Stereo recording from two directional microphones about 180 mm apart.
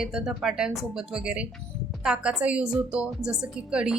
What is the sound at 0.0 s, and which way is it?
A woman's voice, 5° right (ahead or behind).